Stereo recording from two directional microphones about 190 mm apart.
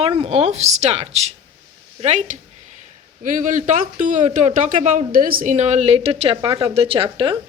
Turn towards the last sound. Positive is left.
turn(degrees=-30)  # may be behind; listen again after turning